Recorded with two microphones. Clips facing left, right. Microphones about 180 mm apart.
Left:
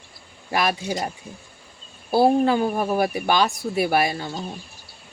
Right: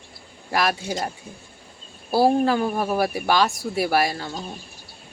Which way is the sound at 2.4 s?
15° left (ahead or behind).